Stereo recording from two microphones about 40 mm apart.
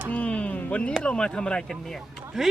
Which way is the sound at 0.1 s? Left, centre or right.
Left.